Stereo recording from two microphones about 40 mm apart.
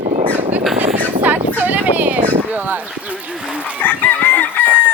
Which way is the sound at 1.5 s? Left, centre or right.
Right.